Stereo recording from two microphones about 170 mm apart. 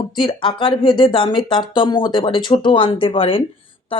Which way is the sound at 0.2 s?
30° left (ahead or behind).